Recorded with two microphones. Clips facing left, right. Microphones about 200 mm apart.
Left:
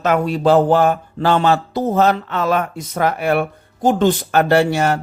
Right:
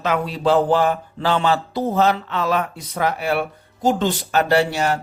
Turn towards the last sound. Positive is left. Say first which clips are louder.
# left 3 dB
turn(degrees=55)  # may be behind; listen again after turning